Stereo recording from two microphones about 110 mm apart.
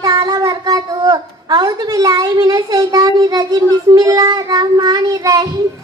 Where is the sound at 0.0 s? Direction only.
35° right (ahead or behind).